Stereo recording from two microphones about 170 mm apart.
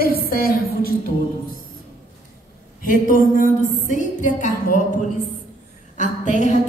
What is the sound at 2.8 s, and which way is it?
A woman's voice, 55° left (ahead or behind).